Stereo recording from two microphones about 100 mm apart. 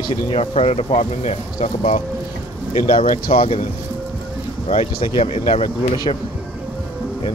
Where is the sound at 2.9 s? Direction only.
65° left (ahead or behind).